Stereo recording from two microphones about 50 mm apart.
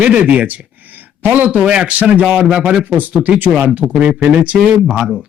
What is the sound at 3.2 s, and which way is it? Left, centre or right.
Speech, right.